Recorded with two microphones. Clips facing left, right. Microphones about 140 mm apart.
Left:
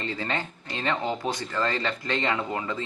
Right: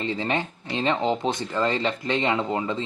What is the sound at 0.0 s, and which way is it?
Speech, 20° right (ahead or behind).